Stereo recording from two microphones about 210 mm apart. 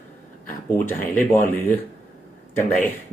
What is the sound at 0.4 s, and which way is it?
Speech, 10° left (ahead or behind).